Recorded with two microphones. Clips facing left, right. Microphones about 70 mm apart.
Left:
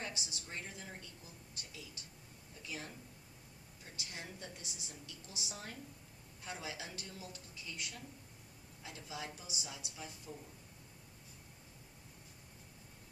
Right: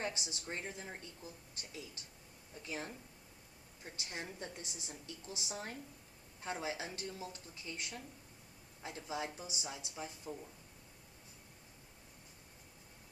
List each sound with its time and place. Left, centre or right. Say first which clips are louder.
0.0 s a woman's voice: right 4 dB; right